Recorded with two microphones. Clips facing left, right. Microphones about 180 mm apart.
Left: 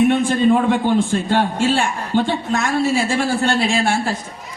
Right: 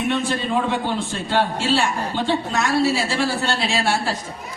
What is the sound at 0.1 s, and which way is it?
A man's voice, 50° left (ahead or behind).